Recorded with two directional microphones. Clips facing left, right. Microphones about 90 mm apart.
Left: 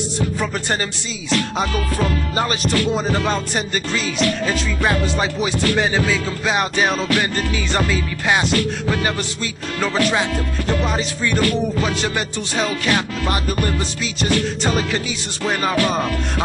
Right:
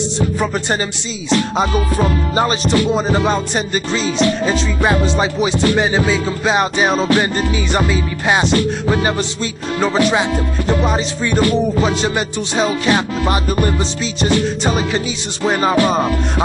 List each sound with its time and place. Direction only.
0.2 s music: 20° right (ahead or behind)